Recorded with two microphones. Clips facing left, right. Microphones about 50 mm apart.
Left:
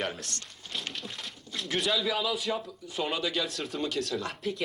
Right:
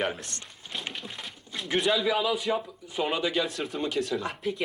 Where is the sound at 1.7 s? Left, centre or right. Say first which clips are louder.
Right 4 dB; centre.